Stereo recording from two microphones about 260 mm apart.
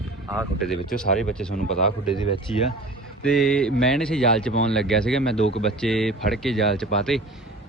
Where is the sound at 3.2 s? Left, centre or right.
Centre.